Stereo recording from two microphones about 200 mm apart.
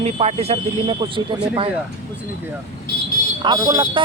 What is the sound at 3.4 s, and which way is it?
Speech, 20° right (ahead or behind).